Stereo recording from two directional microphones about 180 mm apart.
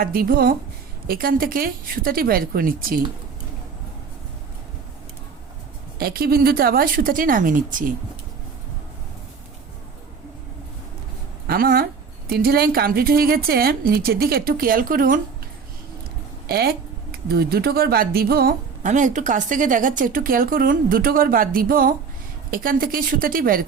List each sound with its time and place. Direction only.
0.0 s a woman's voice: 55° right (ahead or behind)
6.0 s speech: 55° right (ahead or behind)
11.4 s a woman's voice: 55° right (ahead or behind)
16.5 s speech: 60° right (ahead or behind)